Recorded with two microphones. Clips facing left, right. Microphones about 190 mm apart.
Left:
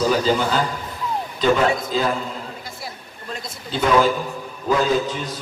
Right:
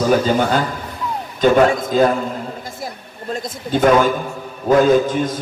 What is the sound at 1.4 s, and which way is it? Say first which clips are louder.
Speech: right 5 dB; 50° right (ahead or behind).